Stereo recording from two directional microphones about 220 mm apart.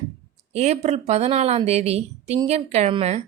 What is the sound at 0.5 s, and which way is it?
Speech, 30° right (ahead or behind).